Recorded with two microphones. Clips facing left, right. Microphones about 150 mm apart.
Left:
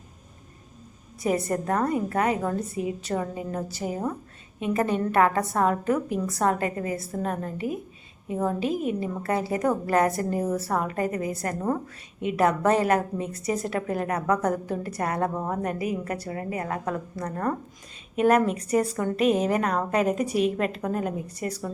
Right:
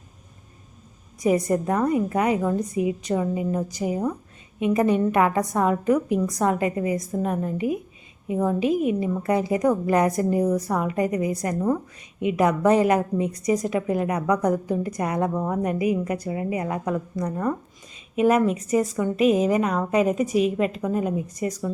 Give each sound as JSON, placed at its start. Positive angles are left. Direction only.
{"t": 1.3, "sound": "a woman's voice", "side_deg": -15}